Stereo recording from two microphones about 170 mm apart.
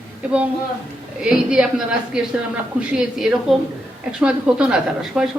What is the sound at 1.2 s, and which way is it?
A woman's voice, 5° right (ahead or behind).